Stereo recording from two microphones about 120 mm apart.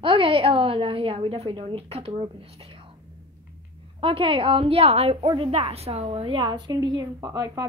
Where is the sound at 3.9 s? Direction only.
50° right (ahead or behind).